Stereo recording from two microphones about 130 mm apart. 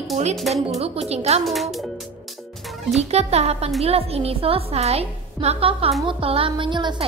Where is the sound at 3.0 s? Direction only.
55° right (ahead or behind).